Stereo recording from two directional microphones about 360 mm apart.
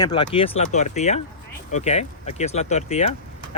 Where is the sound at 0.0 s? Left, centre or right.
Centre.